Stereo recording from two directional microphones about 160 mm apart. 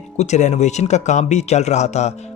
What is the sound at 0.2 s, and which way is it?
Speech, 45° left (ahead or behind).